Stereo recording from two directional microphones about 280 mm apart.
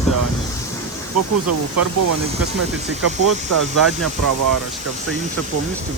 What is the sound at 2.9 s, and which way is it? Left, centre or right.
Speech, right.